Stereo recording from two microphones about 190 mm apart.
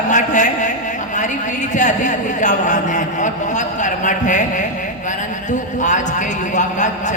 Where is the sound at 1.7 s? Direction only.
40° left (ahead or behind).